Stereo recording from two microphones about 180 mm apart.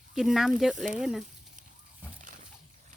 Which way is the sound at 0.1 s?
5° right (ahead or behind).